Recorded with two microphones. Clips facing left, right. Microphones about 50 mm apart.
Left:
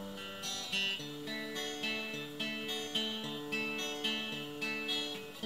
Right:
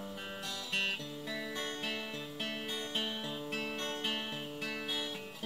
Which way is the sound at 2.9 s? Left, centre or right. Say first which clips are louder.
Right 1 dB; centre.